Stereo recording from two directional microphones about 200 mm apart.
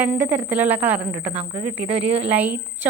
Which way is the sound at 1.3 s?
25° right (ahead or behind).